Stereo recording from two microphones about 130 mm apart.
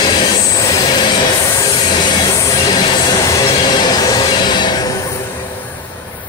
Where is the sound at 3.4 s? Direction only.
35° left (ahead or behind).